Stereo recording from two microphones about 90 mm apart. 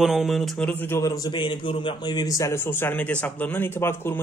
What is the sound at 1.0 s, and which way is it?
Speech, 40° left (ahead or behind).